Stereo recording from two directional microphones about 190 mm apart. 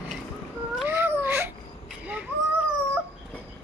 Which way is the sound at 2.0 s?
5° right (ahead or behind).